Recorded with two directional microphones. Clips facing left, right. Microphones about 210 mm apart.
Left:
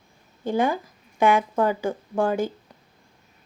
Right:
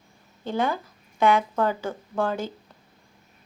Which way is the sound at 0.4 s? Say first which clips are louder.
Left 3 dB; 15° left (ahead or behind).